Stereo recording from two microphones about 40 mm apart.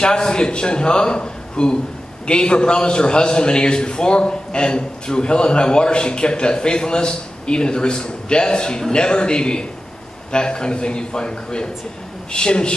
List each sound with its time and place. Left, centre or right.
0.0 s a man's voice: left